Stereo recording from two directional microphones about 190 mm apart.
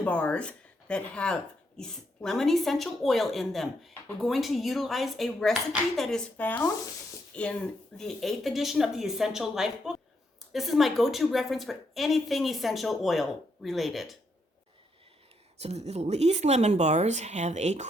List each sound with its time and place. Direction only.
0.0 s speech: 5° left (ahead or behind)
15.6 s speech: 35° right (ahead or behind)